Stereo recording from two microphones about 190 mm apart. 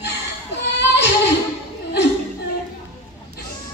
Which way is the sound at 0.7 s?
65° left (ahead or behind).